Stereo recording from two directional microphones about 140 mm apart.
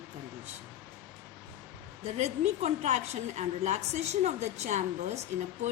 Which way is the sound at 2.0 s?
50° right (ahead or behind).